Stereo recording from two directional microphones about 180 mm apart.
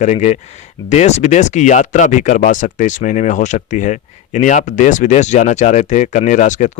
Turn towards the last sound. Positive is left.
turn(degrees=45)  # may be behind; listen again after turning